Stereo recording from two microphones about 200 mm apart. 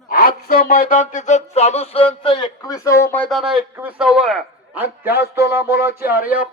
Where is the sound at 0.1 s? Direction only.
45° left (ahead or behind); by 4.8 s centre (ahead or behind).